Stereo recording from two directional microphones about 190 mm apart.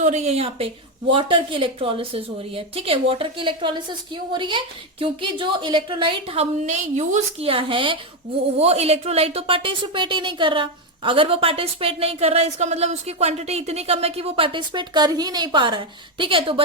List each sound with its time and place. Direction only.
0.0 s a woman's voice: 35° right (ahead or behind)